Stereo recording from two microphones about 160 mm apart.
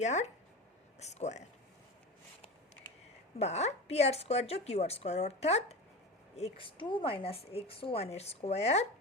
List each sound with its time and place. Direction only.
0.0 s speech: 45° left (ahead or behind)
3.3 s a woman's voice: 45° left (ahead or behind)